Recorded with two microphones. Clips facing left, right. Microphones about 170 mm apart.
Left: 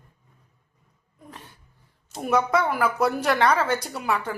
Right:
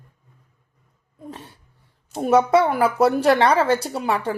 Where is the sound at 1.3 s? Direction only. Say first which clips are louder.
Right 5 dB; 30° right (ahead or behind).